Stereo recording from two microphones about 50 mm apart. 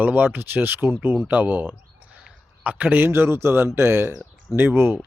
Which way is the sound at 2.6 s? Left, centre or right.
Right.